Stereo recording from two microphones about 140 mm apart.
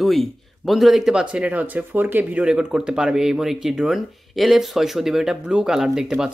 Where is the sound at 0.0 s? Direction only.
Centre (ahead or behind).